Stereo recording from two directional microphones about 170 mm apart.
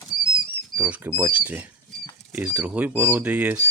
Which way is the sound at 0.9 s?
10° right (ahead or behind).